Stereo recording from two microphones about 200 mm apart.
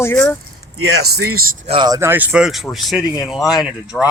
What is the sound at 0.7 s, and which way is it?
Speech, 90° right.